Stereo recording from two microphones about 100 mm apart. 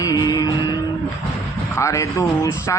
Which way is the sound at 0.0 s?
40° left (ahead or behind).